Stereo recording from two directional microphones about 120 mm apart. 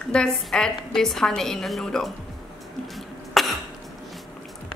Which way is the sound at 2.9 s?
Centre (ahead or behind).